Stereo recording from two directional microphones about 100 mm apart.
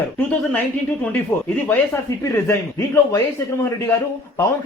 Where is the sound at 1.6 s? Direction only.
20° left (ahead or behind).